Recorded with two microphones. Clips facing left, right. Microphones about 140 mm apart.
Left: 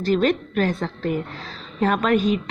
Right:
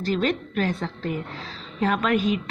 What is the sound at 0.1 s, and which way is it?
Speech, 50° left (ahead or behind).